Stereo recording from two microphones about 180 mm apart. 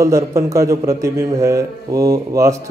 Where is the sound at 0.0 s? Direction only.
15° right (ahead or behind).